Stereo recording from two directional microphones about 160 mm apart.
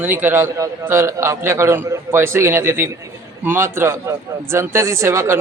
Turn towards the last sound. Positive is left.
turn(degrees=-15)  # may be behind; listen again after turning